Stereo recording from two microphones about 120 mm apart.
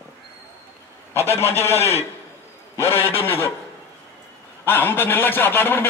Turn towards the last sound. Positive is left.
turn(degrees=15)  # may be behind; listen again after turning